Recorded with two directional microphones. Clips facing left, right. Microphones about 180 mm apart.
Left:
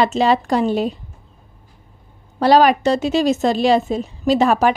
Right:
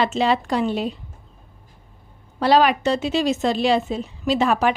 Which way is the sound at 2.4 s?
40° left (ahead or behind).